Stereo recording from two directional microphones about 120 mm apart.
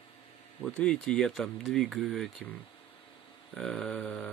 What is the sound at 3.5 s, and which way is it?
Speech, 5° left (ahead or behind).